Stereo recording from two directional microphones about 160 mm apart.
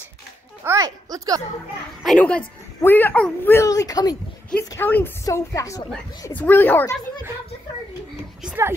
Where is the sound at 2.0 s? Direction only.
5° left (ahead or behind).